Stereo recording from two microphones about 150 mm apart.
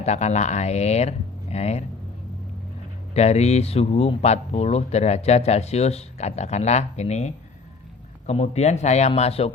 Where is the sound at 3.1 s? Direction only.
45° left (ahead or behind).